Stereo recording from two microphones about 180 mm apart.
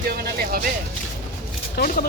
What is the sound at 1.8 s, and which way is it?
Speech, 60° left (ahead or behind).